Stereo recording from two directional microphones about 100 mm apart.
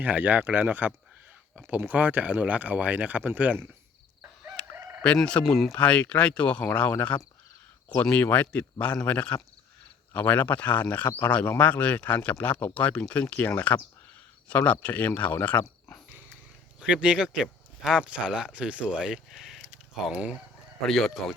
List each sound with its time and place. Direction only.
0.0 s speech: 15° right (ahead or behind)
4.8 s chicken: 20° right (ahead or behind)
5.0 s speech: 10° left (ahead or behind)
16.8 s speech: 10° right (ahead or behind)
20.8 s speech: centre (ahead or behind)